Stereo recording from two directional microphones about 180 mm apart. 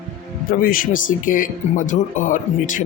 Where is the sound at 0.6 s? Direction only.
50° left (ahead or behind).